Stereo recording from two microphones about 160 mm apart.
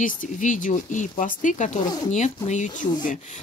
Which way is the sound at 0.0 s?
55° left (ahead or behind).